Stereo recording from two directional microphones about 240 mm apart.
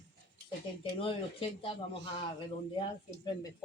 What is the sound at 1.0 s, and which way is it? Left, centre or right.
Speech, left.